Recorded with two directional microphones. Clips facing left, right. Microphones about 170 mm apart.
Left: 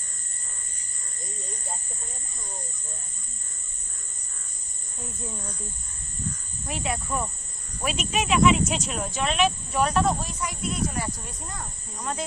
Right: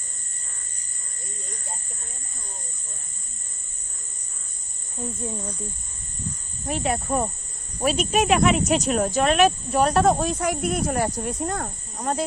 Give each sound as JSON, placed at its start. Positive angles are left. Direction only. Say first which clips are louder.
{"t": 5.0, "sound": "speech", "louder": "right 6 dB", "side_deg": -25}
{"t": 6.8, "sound": "speech", "louder": "right 5 dB", "side_deg": -50}
{"t": 7.8, "sound": "speech", "louder": "right 6 dB", "side_deg": -40}
{"t": 10.2, "sound": "speech", "louder": "right 8 dB", "side_deg": -60}
{"t": 11.6, "sound": "speech", "louder": "right 6 dB", "side_deg": -45}